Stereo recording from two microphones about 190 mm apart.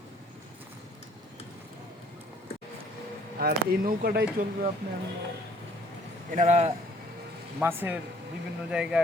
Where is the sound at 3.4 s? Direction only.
50° right (ahead or behind).